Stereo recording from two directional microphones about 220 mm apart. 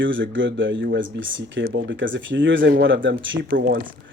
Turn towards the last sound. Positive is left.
turn(degrees=-55)  # may be behind; listen again after turning